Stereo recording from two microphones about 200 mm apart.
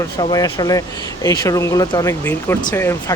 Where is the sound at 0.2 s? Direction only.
20° left (ahead or behind).